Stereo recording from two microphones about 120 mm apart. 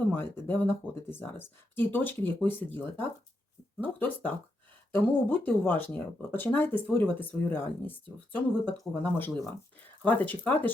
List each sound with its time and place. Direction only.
0.1 s speech: 20° left (ahead or behind)